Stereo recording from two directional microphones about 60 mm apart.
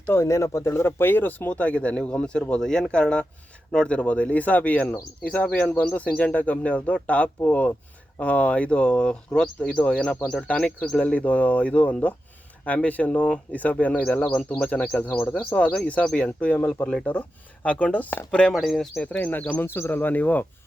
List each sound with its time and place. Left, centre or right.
0.1 s speech: left; by 18.5 s centre
18.5 s speech: centre
18.9 s speech: left
19.6 s speech: left